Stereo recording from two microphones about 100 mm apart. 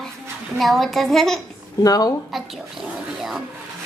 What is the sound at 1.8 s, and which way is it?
Speech, 40° left (ahead or behind).